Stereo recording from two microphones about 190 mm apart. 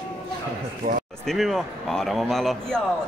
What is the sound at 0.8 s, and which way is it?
Speech, 45° right (ahead or behind).